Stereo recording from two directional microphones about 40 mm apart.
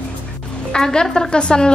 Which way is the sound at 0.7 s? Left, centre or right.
Centre.